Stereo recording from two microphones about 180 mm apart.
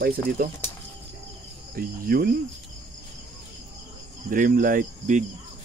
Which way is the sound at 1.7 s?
55° right (ahead or behind).